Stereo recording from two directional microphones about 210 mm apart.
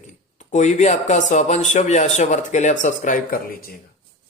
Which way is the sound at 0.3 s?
35° left (ahead or behind).